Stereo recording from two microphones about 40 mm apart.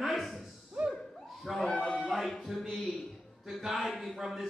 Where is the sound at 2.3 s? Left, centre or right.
Centre.